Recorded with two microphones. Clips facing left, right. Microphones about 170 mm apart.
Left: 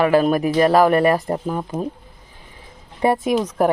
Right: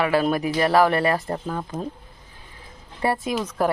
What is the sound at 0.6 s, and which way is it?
Speech, 20° left (ahead or behind).